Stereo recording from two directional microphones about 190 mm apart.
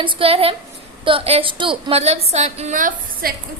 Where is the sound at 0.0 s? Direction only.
30° right (ahead or behind).